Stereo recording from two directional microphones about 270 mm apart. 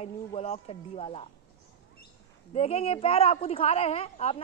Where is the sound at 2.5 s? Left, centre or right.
Left.